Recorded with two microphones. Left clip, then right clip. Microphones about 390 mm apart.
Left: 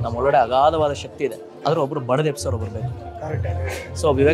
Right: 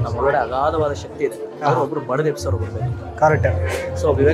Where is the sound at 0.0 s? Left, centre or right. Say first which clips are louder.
Left 1 dB; left.